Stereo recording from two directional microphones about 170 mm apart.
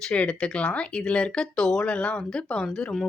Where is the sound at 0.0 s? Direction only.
5° left (ahead or behind).